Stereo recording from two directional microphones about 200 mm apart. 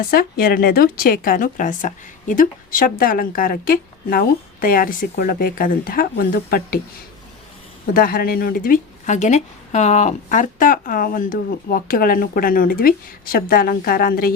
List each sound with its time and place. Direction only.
0.0 s speech: 45° left (ahead or behind)
7.9 s speech: 50° left (ahead or behind)